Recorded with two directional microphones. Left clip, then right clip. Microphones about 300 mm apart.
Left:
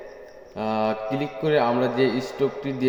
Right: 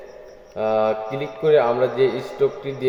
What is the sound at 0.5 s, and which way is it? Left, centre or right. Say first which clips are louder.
Speech: right 5 dB; left.